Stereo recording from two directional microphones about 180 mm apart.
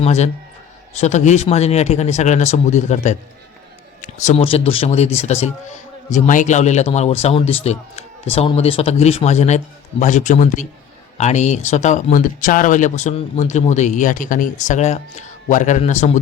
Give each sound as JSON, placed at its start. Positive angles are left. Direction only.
{"t": 0.0, "sound": "a man's voice", "side_deg": 40}
{"t": 4.0, "sound": "a sound", "side_deg": 45}
{"t": 4.4, "sound": "a man's voice", "side_deg": 35}